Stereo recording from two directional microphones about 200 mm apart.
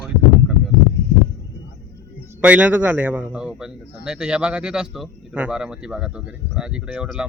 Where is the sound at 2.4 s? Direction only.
5° right (ahead or behind).